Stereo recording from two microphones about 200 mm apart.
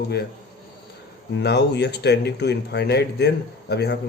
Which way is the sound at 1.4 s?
55° left (ahead or behind).